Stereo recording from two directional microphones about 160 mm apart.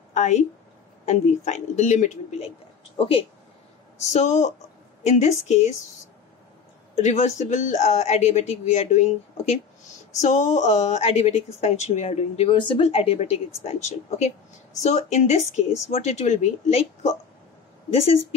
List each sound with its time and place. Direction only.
0.1 s speech: 45° left (ahead or behind)
4.1 s speech: 45° left (ahead or behind)
7.0 s speech: 45° left (ahead or behind)
17.9 s speech: 40° left (ahead or behind)